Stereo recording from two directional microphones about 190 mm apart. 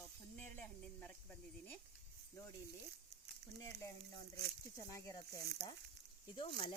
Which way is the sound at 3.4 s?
60° right (ahead or behind).